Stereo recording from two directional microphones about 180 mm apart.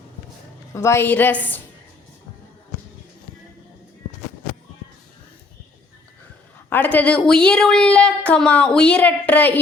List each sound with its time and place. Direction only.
0.7 s a woman's voice: 15° left (ahead or behind)
6.7 s a woman's voice: 10° left (ahead or behind)